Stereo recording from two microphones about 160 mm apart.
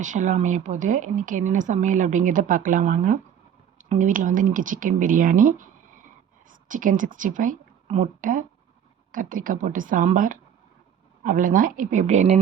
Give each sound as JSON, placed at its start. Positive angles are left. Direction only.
{"t": 0.0, "sound": "speech", "side_deg": -50}
{"t": 6.7, "sound": "a woman's voice", "side_deg": -55}